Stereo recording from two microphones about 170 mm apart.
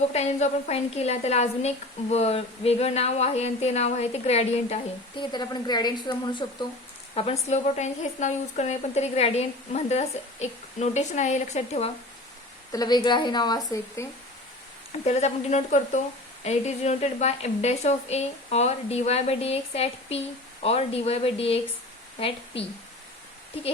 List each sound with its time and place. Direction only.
0.1 s a woman's voice: 40° left (ahead or behind)
12.7 s a woman's voice: 25° left (ahead or behind)
15.0 s a woman's voice: 40° left (ahead or behind)